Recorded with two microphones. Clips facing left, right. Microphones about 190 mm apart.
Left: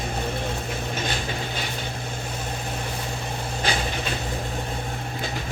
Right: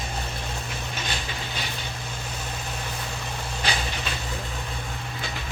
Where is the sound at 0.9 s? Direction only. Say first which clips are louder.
Left 4 dB; 50° left (ahead or behind).